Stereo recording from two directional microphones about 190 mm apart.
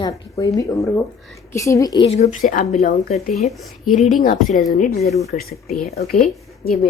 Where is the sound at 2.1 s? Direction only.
40° left (ahead or behind).